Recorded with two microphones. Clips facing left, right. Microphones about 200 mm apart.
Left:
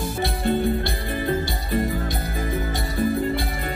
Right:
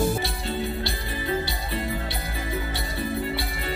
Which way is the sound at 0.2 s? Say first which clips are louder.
Left 7 dB; 55° left (ahead or behind).